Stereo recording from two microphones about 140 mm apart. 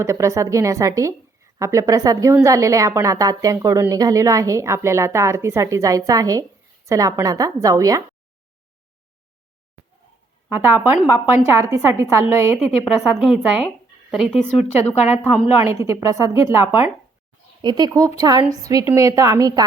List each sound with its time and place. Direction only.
0.0 s a woman's voice: 20° right (ahead or behind)
10.5 s a woman's voice: 15° right (ahead or behind)
13.1 s speech: 5° right (ahead or behind)
14.4 s a woman's voice: 50° left (ahead or behind)
15.6 s a woman's voice: 20° right (ahead or behind)
17.6 s a woman's voice: 30° right (ahead or behind)